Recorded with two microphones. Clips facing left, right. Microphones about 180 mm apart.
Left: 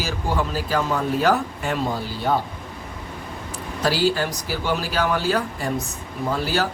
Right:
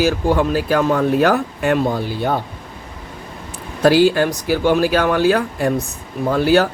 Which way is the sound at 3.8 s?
55° right (ahead or behind).